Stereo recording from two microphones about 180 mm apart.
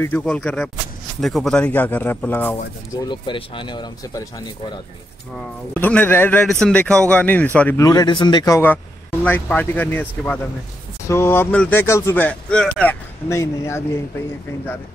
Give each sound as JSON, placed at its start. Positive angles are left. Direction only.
{"t": 0.0, "sound": "speech", "side_deg": 5}
{"t": 2.9, "sound": "speech", "side_deg": 25}
{"t": 5.8, "sound": "speech", "side_deg": 10}
{"t": 7.8, "sound": "speech", "side_deg": 20}
{"t": 13.3, "sound": "speech", "side_deg": 15}